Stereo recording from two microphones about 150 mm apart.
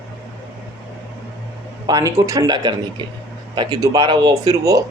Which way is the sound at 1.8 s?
20° right (ahead or behind).